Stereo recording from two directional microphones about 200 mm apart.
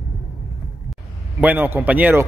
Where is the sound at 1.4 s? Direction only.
10° right (ahead or behind).